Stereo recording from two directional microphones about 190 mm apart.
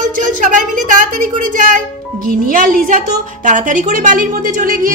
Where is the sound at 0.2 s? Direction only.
45° right (ahead or behind).